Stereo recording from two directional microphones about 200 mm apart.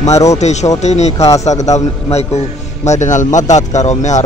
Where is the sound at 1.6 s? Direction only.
35° left (ahead or behind).